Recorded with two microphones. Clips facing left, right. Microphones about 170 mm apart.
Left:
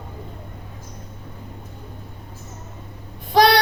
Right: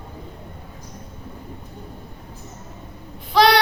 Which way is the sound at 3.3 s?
45° left (ahead or behind).